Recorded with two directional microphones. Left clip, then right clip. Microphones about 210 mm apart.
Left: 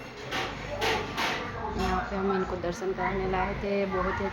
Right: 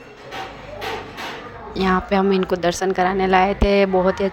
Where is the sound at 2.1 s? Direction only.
45° right (ahead or behind).